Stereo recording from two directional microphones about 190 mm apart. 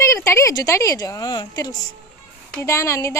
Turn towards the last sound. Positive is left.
turn(degrees=15)  # may be behind; listen again after turning